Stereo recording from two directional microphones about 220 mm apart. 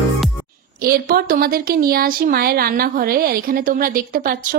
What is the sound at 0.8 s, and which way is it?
Speech, 45° right (ahead or behind).